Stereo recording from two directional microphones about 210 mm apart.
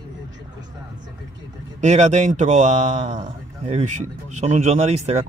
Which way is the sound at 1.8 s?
35° right (ahead or behind).